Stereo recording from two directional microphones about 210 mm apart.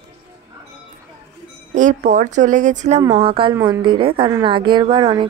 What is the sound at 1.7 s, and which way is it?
A woman's voice, 35° right (ahead or behind).